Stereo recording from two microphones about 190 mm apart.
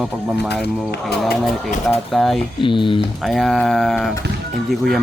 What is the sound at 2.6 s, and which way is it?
Speech, 25° left (ahead or behind).